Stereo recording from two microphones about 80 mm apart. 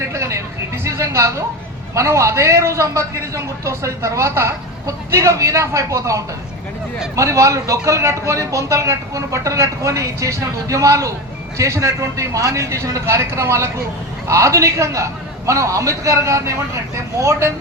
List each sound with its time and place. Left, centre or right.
0.1 s a man's voice: right
7.2 s a man's voice: right